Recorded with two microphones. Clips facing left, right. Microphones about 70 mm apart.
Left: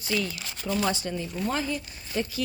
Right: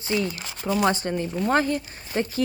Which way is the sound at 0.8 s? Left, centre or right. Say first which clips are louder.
Right 6 dB; right.